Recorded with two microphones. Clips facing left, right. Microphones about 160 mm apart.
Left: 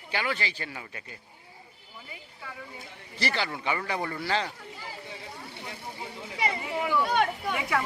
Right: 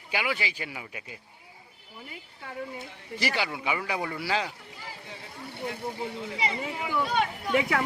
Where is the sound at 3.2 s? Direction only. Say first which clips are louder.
Right 1 dB; 10° right (ahead or behind).